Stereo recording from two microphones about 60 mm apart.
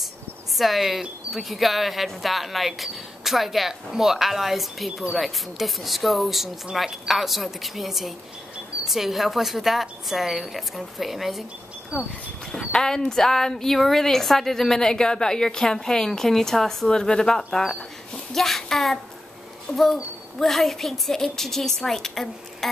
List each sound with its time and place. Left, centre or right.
0.6 s speech: centre
12.4 s speech: centre
18.3 s child singing: centre
19.7 s speech: centre